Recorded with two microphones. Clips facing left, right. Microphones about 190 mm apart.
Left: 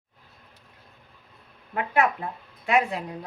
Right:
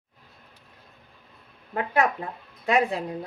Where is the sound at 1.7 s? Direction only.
35° right (ahead or behind).